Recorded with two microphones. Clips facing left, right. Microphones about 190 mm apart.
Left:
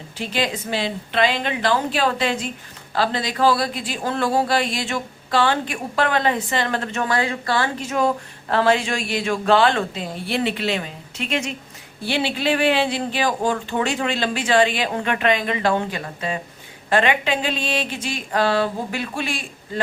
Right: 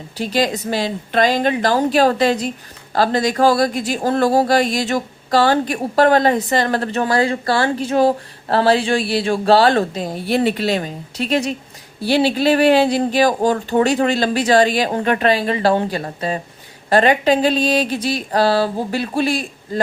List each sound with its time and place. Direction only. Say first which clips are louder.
0.2 s speech: right 5 dB; 40° right (ahead or behind)